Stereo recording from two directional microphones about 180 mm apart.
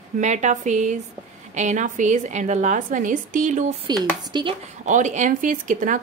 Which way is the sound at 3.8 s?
20° right (ahead or behind).